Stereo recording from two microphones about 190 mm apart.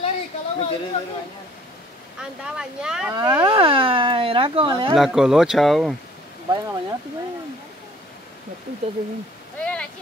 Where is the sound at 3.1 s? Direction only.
20° right (ahead or behind).